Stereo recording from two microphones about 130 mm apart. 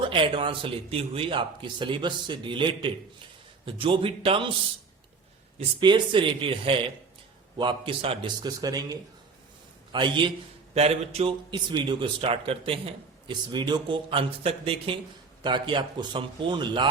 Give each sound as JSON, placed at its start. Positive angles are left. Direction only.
{"t": 0.0, "sound": "a man's voice", "side_deg": -40}
{"t": 5.5, "sound": "a man's voice", "side_deg": -40}
{"t": 8.4, "sound": "a man's voice", "side_deg": -30}
{"t": 10.8, "sound": "speech", "side_deg": -50}
{"t": 11.5, "sound": "a man's voice", "side_deg": -35}